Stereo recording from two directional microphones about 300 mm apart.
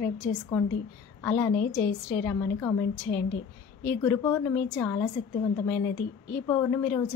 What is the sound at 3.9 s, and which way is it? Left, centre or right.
A woman's voice, centre.